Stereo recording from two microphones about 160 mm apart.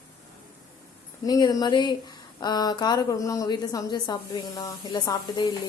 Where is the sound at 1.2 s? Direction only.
25° left (ahead or behind).